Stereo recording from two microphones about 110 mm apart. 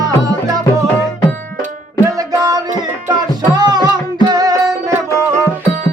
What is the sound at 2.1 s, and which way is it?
Music, 30° right (ahead or behind).